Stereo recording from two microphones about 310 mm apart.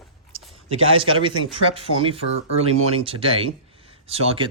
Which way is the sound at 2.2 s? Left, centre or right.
Right.